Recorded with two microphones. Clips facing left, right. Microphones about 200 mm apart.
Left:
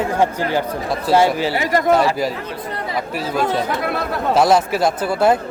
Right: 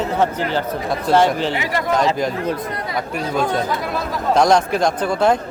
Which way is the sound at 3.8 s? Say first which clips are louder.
Left 2 dB; 60° left (ahead or behind).